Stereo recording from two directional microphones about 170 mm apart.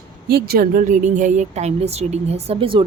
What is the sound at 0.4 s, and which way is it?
Speech, 65° right (ahead or behind).